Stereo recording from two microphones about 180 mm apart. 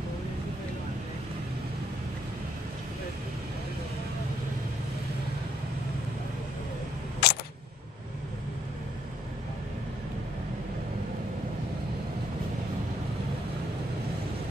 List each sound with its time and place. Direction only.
7.2 s single-lens reflex camera: 60° left (ahead or behind)